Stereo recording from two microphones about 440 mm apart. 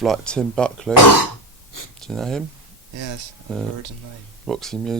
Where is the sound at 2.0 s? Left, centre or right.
Centre.